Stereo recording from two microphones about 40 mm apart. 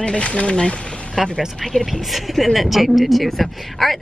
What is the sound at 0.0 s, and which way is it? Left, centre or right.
Speech, left.